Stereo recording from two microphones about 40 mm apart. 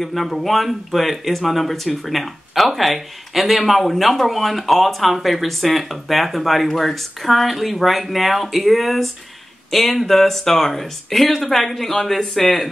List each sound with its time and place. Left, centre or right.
0.0 s speech: centre